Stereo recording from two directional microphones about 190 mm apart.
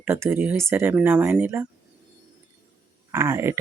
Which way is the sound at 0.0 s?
10° right (ahead or behind).